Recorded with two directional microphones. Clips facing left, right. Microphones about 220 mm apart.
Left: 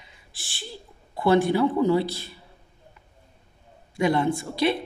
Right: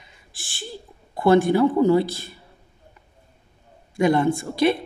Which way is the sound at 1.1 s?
50° right (ahead or behind).